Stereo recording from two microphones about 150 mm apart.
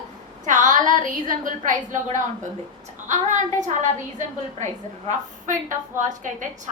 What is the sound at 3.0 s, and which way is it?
A woman's voice, 55° right (ahead or behind).